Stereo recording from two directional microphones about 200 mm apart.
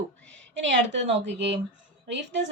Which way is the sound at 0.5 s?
65° right (ahead or behind).